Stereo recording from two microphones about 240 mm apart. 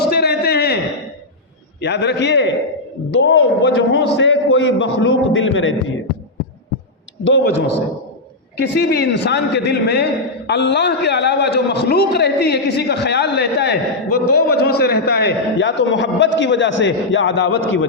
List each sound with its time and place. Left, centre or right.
0.0 s a sound: left
1.8 s a man's voice: left
7.3 s a man's voice: left
8.5 s a man's voice: left